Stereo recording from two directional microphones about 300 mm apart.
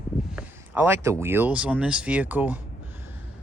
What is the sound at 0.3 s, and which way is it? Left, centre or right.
Speech, centre.